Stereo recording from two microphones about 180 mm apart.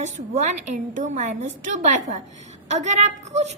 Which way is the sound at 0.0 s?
40° right (ahead or behind).